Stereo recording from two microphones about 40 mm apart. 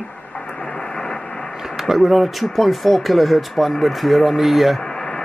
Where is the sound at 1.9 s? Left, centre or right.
Centre.